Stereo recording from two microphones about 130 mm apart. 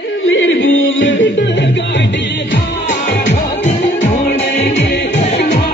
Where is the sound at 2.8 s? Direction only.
60° left (ahead or behind).